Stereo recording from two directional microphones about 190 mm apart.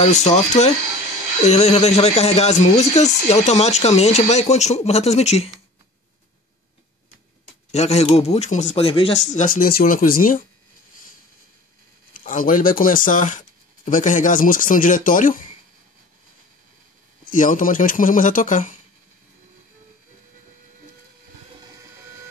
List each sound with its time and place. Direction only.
0.0 s speech: 35° left (ahead or behind)
7.7 s speech: 35° left (ahead or behind)
12.1 s speech: 45° left (ahead or behind)
17.3 s speech: 45° left (ahead or behind)